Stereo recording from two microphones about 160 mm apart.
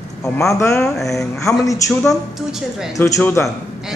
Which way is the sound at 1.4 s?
20° left (ahead or behind).